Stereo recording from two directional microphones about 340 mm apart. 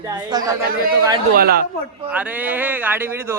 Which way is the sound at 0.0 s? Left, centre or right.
Centre.